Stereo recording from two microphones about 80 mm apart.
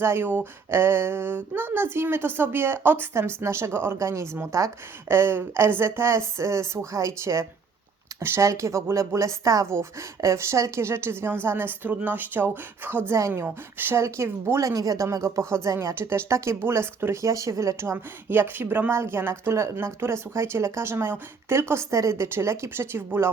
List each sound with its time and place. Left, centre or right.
0.0 s a woman's voice: right
13.1 s a woman's voice: right